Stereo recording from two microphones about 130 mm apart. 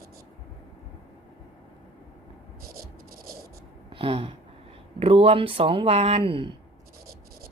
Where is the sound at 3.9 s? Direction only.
45° right (ahead or behind).